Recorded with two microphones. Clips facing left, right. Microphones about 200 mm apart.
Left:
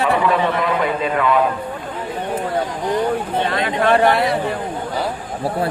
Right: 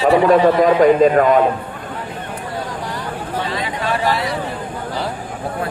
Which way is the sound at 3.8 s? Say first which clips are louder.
Left 6 dB; 60° left (ahead or behind).